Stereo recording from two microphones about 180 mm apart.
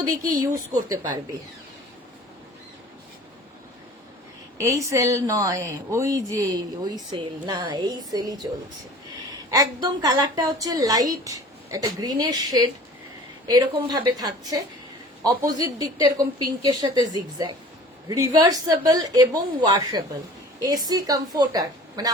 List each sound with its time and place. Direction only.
0.2 s speech: 20° right (ahead or behind)
4.6 s a woman's voice: 15° right (ahead or behind)